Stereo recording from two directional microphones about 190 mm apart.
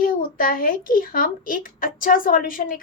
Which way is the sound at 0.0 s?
50° left (ahead or behind).